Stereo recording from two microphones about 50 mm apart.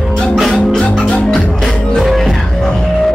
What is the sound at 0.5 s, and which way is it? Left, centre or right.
Music, centre.